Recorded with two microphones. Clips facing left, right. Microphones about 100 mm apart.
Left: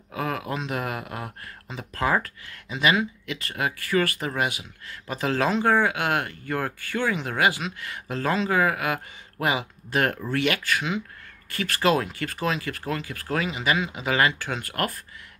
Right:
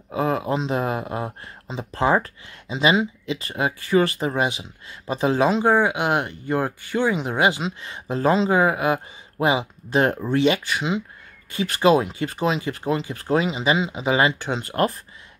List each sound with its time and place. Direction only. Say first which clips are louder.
0.1 s speech: right 6 dB; 25° right (ahead or behind)